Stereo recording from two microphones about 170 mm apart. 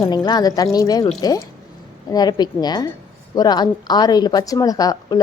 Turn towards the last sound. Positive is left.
turn(degrees=20)  # may be behind; listen again after turning